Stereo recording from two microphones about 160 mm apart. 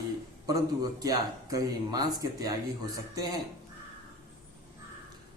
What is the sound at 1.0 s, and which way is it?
A man's voice, 20° right (ahead or behind).